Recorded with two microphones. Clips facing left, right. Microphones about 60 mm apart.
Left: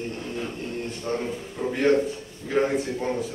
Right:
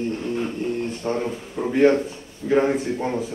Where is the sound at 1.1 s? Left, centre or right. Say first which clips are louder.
Right 1 dB; right.